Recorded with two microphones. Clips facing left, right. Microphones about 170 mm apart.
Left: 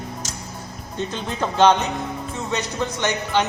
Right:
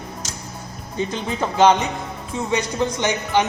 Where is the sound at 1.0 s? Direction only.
10° right (ahead or behind).